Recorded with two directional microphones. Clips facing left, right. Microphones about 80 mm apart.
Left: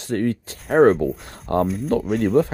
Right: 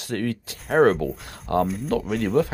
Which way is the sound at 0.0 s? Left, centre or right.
Left.